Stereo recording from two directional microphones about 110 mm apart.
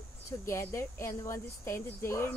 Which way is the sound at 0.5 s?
25° left (ahead or behind).